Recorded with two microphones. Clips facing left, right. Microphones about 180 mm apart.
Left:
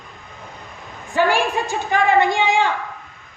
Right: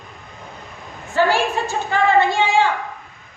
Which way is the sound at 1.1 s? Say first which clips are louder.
Even; 15° left (ahead or behind).